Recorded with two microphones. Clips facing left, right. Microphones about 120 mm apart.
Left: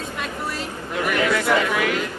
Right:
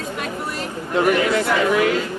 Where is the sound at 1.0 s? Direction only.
30° right (ahead or behind).